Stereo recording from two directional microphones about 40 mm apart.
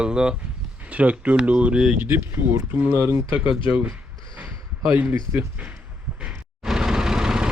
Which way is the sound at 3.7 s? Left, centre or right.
Right.